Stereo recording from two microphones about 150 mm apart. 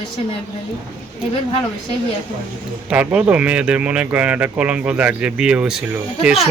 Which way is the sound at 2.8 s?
10° right (ahead or behind).